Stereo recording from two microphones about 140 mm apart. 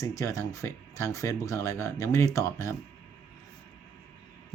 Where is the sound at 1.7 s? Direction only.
20° right (ahead or behind).